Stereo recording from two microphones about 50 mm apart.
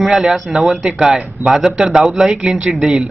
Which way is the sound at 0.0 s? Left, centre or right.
Centre.